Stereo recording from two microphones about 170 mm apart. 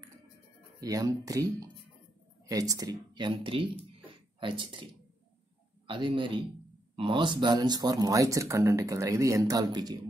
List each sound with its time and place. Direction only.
0.7 s speech: 20° right (ahead or behind)
5.9 s speech: 30° right (ahead or behind)